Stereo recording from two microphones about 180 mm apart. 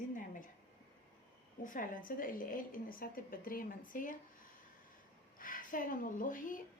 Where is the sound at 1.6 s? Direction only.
45° left (ahead or behind).